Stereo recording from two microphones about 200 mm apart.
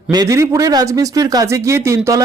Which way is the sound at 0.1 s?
20° right (ahead or behind).